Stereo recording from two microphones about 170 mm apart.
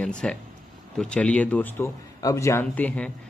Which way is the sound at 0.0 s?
5° left (ahead or behind).